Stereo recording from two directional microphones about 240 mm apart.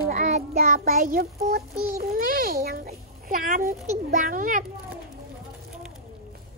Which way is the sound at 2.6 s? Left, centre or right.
Right.